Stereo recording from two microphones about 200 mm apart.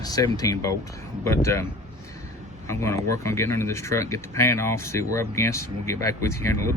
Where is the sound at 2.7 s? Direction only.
15° left (ahead or behind).